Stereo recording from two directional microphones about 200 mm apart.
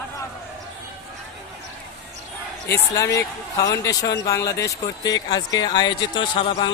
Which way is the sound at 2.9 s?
15° left (ahead or behind).